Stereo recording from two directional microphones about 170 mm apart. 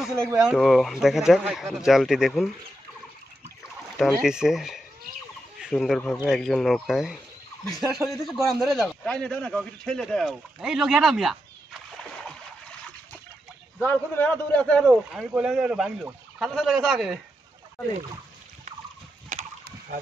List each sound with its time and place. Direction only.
0.4 s a man's voice: 5° right (ahead or behind)
4.2 s a man's voice: 5° right (ahead or behind)
5.6 s fowl: centre (ahead or behind)
6.2 s a man's voice: centre (ahead or behind)
13.7 s a man's voice: 10° left (ahead or behind)
19.3 s a sound: 45° right (ahead or behind)